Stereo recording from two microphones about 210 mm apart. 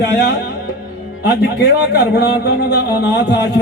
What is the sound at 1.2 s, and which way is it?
Speech, 50° left (ahead or behind).